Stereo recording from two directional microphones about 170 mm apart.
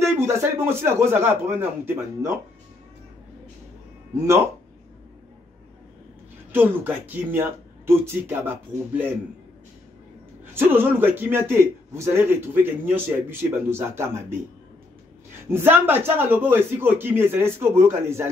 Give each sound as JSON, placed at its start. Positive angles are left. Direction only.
{"t": 0.0, "sound": "a man's voice", "side_deg": -15}
{"t": 4.1, "sound": "a man's voice", "side_deg": -15}
{"t": 6.5, "sound": "a man's voice", "side_deg": -10}
{"t": 10.4, "sound": "a man's voice", "side_deg": -10}
{"t": 15.5, "sound": "a man's voice", "side_deg": -10}